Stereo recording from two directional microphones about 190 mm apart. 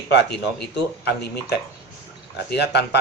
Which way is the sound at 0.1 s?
65° left (ahead or behind).